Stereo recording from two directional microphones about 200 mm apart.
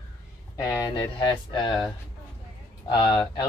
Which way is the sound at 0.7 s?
15° left (ahead or behind).